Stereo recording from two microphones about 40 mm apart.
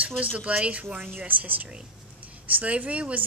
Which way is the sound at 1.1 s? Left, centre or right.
Right.